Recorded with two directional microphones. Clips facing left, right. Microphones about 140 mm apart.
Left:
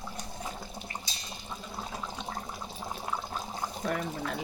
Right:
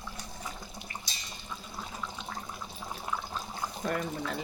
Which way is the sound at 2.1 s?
30° left (ahead or behind).